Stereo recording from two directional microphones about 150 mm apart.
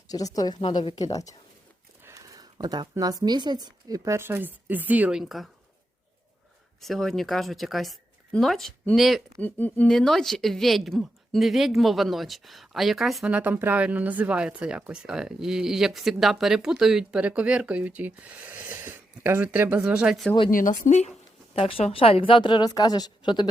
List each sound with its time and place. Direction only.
0.1 s a woman's voice: 25° left (ahead or behind)
2.0 s speech: 25° right (ahead or behind); by 5.5 s centre (ahead or behind)
6.8 s speech: centre (ahead or behind)
9.4 s speech: 10° left (ahead or behind)
20.5 s speech: 60° left (ahead or behind)
21.5 s a woman's voice: 40° left (ahead or behind)